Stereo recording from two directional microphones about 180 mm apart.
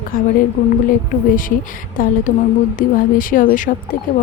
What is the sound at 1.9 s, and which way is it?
A woman's voice, 50° left (ahead or behind).